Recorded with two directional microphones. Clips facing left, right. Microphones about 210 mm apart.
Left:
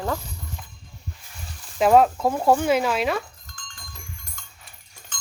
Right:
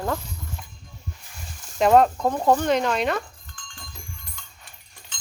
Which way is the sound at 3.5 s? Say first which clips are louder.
Even; 40° left (ahead or behind).